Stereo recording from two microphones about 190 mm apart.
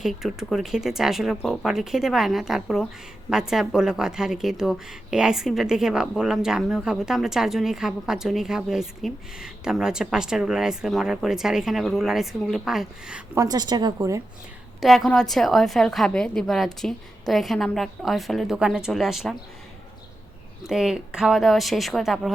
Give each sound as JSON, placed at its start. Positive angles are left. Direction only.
{"t": 0.0, "sound": "a woman's voice", "side_deg": 0}
{"t": 13.3, "sound": "a woman's voice", "side_deg": -20}
{"t": 14.8, "sound": "a woman's voice", "side_deg": 0}
{"t": 20.7, "sound": "a woman's voice", "side_deg": -5}